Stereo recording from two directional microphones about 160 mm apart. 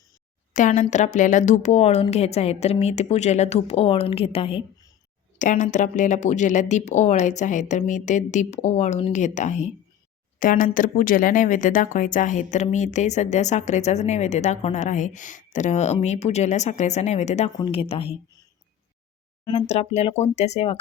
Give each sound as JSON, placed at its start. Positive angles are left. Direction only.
{"t": 0.5, "sound": "speech", "side_deg": 50}
{"t": 5.4, "sound": "speech", "side_deg": 50}
{"t": 19.5, "sound": "speech", "side_deg": 40}